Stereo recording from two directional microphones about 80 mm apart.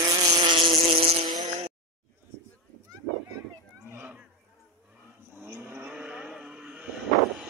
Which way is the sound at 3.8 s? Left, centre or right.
Right.